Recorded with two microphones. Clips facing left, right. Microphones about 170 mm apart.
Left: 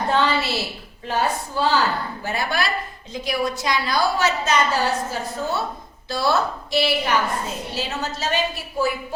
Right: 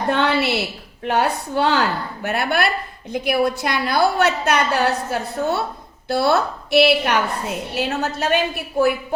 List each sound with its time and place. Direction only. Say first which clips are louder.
0.1 s a woman's voice: right 3 dB; 65° right (ahead or behind)